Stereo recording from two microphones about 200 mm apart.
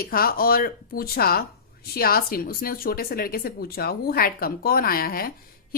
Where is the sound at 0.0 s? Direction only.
45° left (ahead or behind).